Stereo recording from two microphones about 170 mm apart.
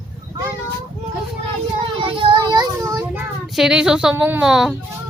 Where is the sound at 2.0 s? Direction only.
30° right (ahead or behind).